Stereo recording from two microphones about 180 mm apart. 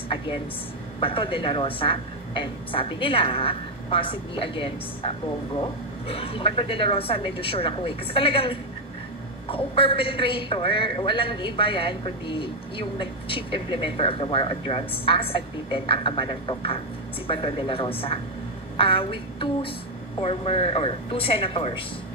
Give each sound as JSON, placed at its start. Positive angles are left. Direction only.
{"t": 1.0, "sound": "a woman's voice", "side_deg": 30}